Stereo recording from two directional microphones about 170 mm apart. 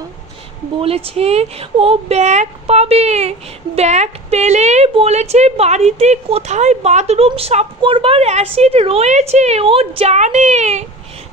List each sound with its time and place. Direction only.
0.7 s speech: 35° right (ahead or behind)